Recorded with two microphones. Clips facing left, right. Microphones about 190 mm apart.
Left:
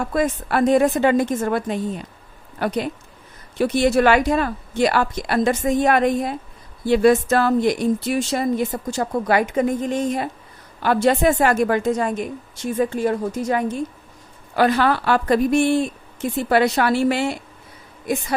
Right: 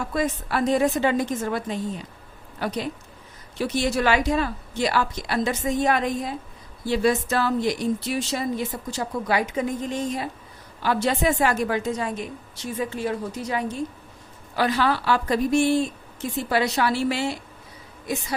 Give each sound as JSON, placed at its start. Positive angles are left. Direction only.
{"t": 0.0, "sound": "a woman's voice", "side_deg": 55}